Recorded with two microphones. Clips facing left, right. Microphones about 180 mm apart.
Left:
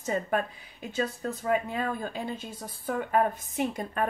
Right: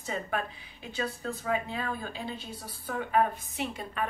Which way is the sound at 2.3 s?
50° left (ahead or behind).